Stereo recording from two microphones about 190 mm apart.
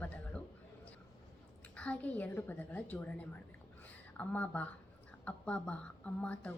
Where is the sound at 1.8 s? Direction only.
5° left (ahead or behind).